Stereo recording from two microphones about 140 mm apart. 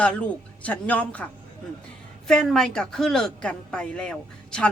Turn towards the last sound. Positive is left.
turn(degrees=5)  # may be behind; listen again after turning